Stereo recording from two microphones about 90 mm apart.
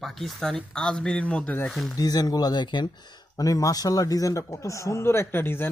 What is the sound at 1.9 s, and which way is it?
Speech, 45° left (ahead or behind).